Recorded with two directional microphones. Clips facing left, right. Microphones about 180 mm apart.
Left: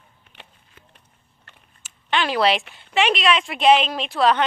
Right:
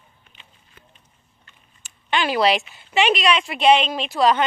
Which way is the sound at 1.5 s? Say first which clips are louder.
Left 4 dB; 70° left (ahead or behind).